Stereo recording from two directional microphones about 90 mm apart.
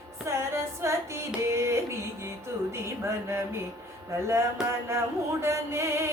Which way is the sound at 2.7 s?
30° right (ahead or behind).